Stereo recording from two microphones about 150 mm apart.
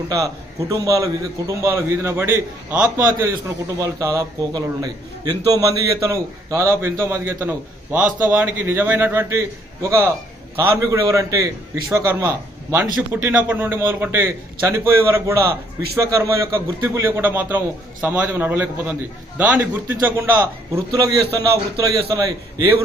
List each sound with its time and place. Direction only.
0.1 s a man's voice: 20° right (ahead or behind)